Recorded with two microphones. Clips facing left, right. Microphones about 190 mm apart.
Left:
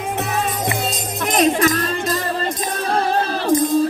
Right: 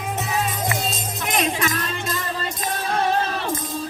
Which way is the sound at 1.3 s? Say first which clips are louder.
Left 7 dB; 40° left (ahead or behind).